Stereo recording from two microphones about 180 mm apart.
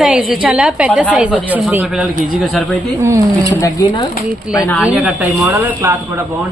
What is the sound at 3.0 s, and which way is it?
Speech, 15° right (ahead or behind).